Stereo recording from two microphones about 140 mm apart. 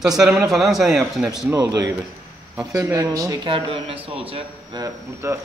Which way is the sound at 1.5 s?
25° right (ahead or behind).